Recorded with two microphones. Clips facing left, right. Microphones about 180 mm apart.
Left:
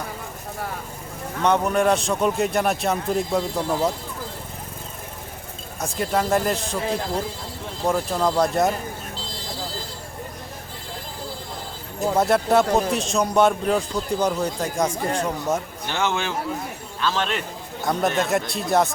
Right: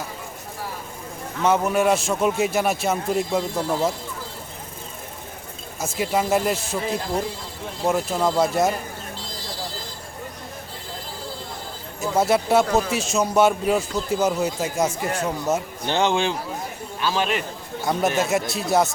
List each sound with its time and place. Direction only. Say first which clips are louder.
1.4 s a man's voice: even; 5° right (ahead or behind)
5.8 s a man's voice: even; 5° right (ahead or behind)
12.1 s a man's voice: even; centre (ahead or behind)
15.9 s a man's voice: right 4 dB; 20° right (ahead or behind); by 18.9 s centre (ahead or behind)